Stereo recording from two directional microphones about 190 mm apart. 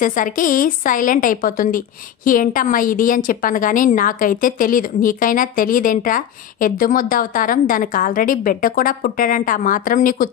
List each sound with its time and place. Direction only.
0.0 s a woman's voice: 45° left (ahead or behind)